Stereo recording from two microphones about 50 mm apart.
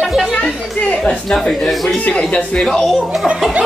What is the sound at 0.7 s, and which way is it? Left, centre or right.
Speech, left.